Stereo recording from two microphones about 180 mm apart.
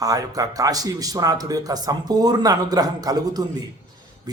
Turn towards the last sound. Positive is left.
turn(degrees=-20)  # may be behind; listen again after turning